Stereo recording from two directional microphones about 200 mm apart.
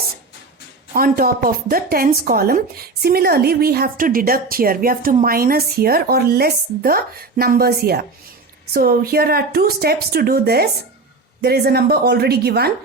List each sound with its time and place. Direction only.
0.9 s speech: 45° right (ahead or behind)